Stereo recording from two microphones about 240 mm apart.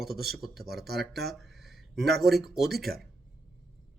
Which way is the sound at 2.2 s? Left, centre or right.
Centre.